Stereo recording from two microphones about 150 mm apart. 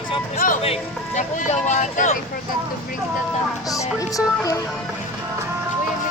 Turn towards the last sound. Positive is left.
turn(degrees=20)  # may be behind; listen again after turning